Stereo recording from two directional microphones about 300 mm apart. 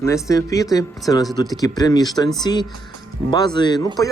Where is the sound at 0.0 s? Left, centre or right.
Centre.